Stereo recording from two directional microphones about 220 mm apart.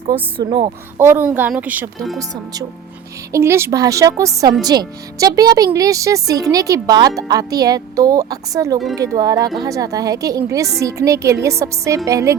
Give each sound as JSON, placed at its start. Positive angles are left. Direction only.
{"t": 0.1, "sound": "speech", "side_deg": -25}
{"t": 0.9, "sound": "speech", "side_deg": -10}
{"t": 3.3, "sound": "speech", "side_deg": -10}